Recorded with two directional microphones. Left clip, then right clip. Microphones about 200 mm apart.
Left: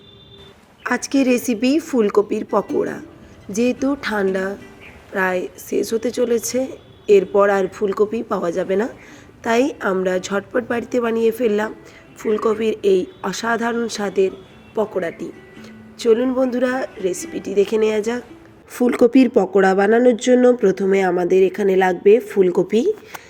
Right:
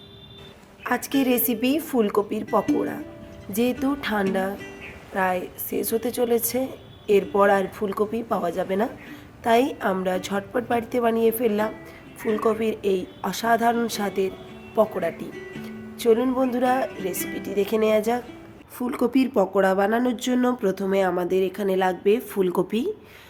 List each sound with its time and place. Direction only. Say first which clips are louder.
0.9 s speech: left 5 dB; 15° left (ahead or behind); by 22.9 s centre (ahead or behind)